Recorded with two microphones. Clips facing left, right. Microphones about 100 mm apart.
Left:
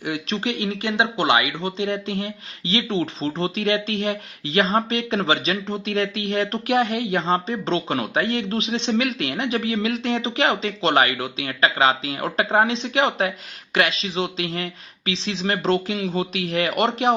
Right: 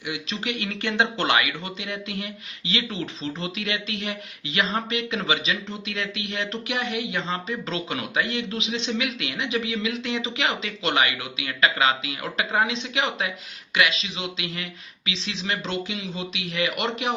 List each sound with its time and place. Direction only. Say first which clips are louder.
0.0 s speech: left 5 dB; 45° left (ahead or behind)
0.6 s speech: even; 20° left (ahead or behind); by 17.2 s 35° left (ahead or behind)